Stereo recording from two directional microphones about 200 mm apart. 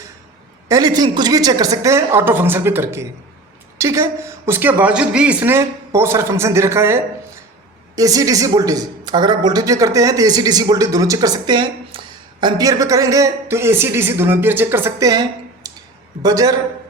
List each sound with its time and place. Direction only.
0.7 s speech: 20° right (ahead or behind)